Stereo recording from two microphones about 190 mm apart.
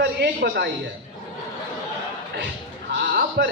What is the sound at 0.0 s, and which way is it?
Speech, 60° right (ahead or behind).